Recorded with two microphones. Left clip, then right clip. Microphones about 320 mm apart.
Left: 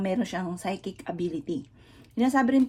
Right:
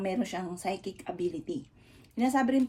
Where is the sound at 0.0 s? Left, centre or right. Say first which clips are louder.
Left 3 dB; left.